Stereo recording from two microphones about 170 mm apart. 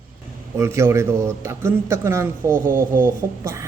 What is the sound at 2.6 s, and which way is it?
Speech, 50° right (ahead or behind).